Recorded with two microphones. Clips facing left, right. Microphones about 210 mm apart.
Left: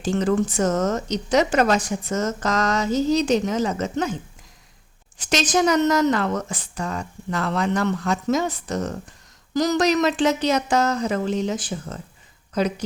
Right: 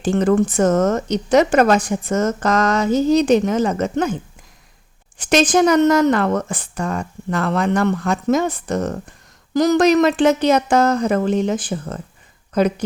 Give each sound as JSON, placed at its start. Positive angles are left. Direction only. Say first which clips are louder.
{"t": 0.0, "sound": "a woman's voice", "louder": "right 5 dB", "side_deg": -55}
{"t": 5.1, "sound": "a woman's voice", "louder": "right 6 dB", "side_deg": -55}